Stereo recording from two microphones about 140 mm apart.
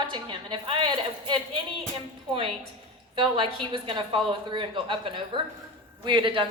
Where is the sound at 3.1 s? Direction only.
35° right (ahead or behind).